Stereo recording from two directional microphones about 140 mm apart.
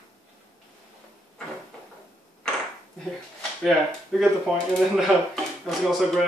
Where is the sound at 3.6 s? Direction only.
Centre (ahead or behind).